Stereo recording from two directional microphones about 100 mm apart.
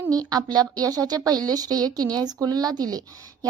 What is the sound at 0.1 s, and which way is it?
Speech, 40° right (ahead or behind).